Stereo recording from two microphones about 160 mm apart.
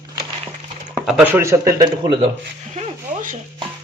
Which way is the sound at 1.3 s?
15° right (ahead or behind).